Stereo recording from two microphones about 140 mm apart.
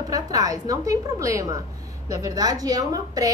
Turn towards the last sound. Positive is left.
turn(degrees=-25)  # may be behind; listen again after turning